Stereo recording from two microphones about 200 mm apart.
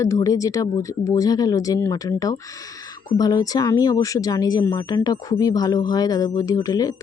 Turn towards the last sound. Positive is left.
turn(degrees=20)  # may be behind; listen again after turning